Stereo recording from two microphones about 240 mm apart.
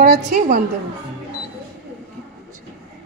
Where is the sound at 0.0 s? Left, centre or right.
Right.